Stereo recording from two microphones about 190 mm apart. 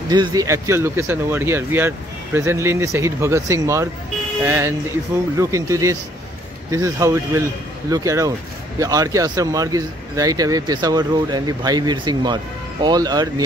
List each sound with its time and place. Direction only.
0.1 s speech: 20° right (ahead or behind)